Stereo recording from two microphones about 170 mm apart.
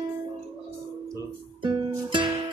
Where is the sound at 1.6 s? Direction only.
25° right (ahead or behind).